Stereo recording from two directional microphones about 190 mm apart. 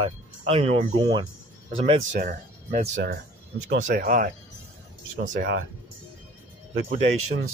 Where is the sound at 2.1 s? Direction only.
40° right (ahead or behind).